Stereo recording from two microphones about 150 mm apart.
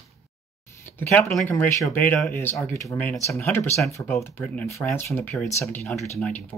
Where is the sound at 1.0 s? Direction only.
15° left (ahead or behind).